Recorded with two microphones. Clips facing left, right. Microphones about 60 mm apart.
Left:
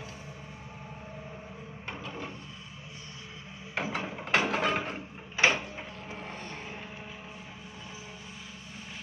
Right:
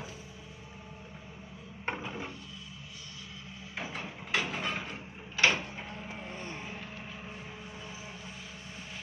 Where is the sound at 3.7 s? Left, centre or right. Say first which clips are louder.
Left 6 dB; left.